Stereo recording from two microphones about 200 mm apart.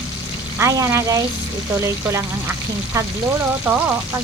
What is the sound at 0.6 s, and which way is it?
Speech, 15° right (ahead or behind).